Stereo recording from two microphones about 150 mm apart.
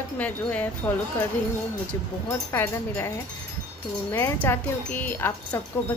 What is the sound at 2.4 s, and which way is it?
Speech, 15° left (ahead or behind).